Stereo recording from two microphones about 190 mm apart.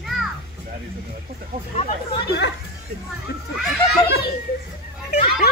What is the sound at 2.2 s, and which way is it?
Speech, 60° left (ahead or behind).